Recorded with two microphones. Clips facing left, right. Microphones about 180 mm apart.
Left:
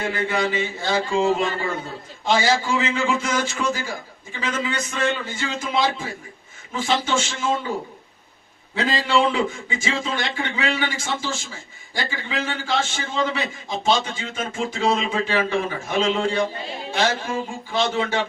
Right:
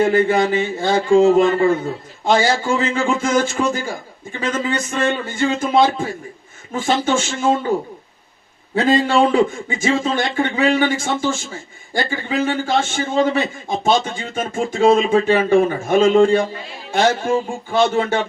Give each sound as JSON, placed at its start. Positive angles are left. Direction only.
{"t": 0.0, "sound": "a man's voice", "side_deg": -50}
{"t": 8.7, "sound": "a man's voice", "side_deg": -50}